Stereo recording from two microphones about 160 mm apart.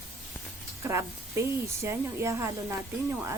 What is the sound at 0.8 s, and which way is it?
A woman's voice, 15° right (ahead or behind).